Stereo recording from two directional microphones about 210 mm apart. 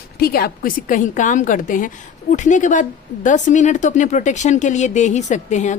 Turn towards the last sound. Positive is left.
turn(degrees=35)  # may be behind; listen again after turning